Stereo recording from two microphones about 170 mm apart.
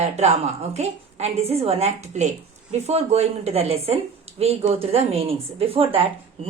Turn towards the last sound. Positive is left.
turn(degrees=-35)  # may be behind; listen again after turning